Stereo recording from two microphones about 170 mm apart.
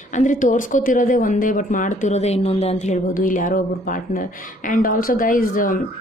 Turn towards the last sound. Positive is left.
turn(degrees=55)  # may be behind; listen again after turning